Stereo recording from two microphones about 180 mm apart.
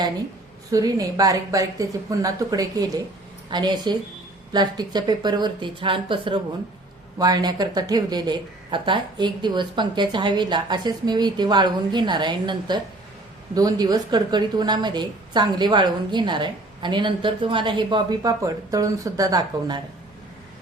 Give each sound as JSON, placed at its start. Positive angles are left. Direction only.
{"t": 0.7, "sound": "a woman's voice", "side_deg": -20}